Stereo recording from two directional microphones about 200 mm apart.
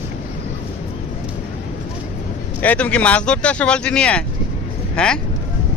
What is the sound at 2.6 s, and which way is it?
Speech, 5° left (ahead or behind).